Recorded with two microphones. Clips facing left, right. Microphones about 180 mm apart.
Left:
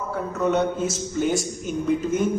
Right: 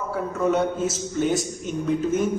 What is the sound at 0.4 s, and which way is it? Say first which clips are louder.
A man's voice: even; 5° right (ahead or behind).